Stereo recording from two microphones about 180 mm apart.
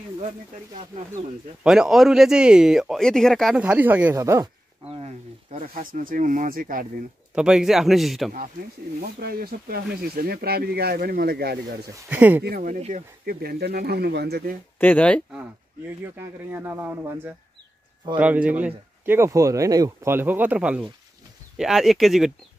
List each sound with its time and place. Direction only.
1.6 s speech: 5° right (ahead or behind)
4.8 s speech: 35° right (ahead or behind); by 7.1 s 50° right (ahead or behind)
7.3 s speech: 5° right (ahead or behind)
8.3 s speech: 50° right (ahead or behind)
11.9 s speech: 10° right (ahead or behind)
12.4 s speech: 50° right (ahead or behind)
13.2 s speech: 60° right (ahead or behind)
14.8 s speech: 10° left (ahead or behind)
16.0 s speech: 15° right (ahead or behind)